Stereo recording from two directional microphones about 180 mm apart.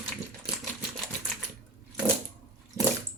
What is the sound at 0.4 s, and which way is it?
Typewriter, 5° right (ahead or behind).